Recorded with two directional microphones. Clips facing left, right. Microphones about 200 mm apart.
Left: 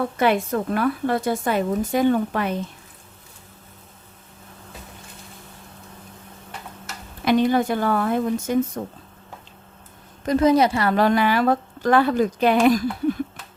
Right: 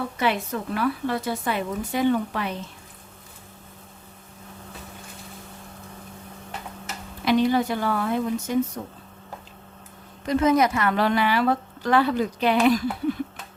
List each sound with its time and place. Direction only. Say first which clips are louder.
0.2 s a woman's voice: left 5 dB; 50° left (ahead or behind)
7.3 s a woman's voice: left 2 dB; 50° left (ahead or behind)
10.2 s a woman's voice: left 3 dB; 35° left (ahead or behind)